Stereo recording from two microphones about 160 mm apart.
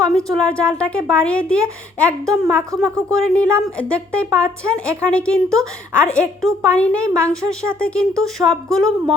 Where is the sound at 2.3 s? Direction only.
20° right (ahead or behind).